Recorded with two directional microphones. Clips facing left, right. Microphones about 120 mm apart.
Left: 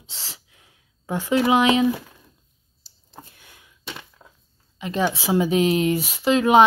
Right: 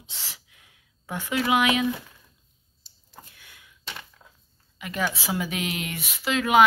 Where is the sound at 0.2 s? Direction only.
30° left (ahead or behind).